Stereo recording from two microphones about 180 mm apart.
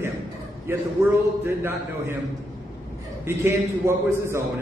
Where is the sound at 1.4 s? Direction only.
15° right (ahead or behind).